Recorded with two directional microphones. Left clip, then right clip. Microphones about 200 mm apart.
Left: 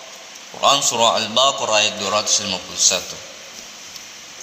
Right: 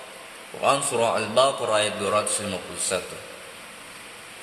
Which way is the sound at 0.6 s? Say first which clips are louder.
Left 6 dB; 20° right (ahead or behind).